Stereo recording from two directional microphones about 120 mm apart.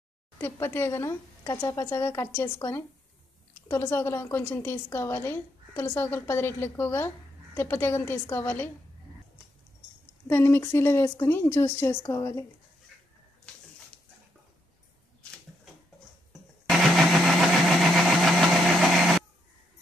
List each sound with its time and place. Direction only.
0.4 s a woman's voice: 20° left (ahead or behind)
10.2 s a woman's voice: 20° left (ahead or behind)
13.5 s dog: 5° left (ahead or behind)
16.6 s engine: centre (ahead or behind)